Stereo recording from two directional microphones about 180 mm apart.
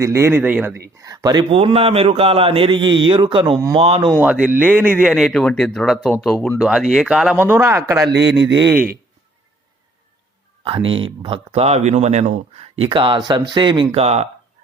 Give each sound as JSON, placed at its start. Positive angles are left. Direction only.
{"t": 0.0, "sound": "a man's voice", "side_deg": -15}
{"t": 4.2, "sound": "a man's voice", "side_deg": -5}
{"t": 7.3, "sound": "speech", "side_deg": -10}
{"t": 10.6, "sound": "a man's voice", "side_deg": -30}
{"t": 13.9, "sound": "speech", "side_deg": -35}